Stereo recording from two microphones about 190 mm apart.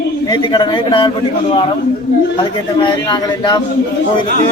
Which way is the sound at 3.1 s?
25° left (ahead or behind).